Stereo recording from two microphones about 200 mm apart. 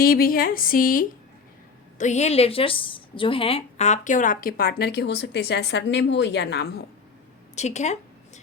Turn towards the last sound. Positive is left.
turn(degrees=35)  # may be behind; listen again after turning